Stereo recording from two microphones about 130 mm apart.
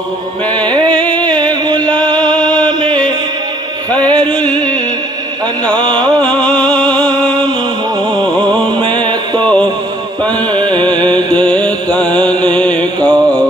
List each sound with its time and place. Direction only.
0.8 s music: 10° left (ahead or behind)
1.4 s music: 35° right (ahead or behind)
2.3 s a sound: 10° left (ahead or behind)
4.0 s a sound: 10° left (ahead or behind)
5.8 s music: 35° right (ahead or behind)
6.2 s music: 10° left (ahead or behind)
9.0 s mantra: 35° right (ahead or behind)
10.2 s music: 10° left (ahead or behind)
11.3 s mantra: 10° left (ahead or behind)